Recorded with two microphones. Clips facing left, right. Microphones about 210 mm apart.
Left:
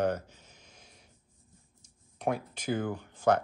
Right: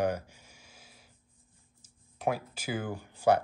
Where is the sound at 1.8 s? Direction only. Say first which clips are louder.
Right 1 dB; 5° right (ahead or behind).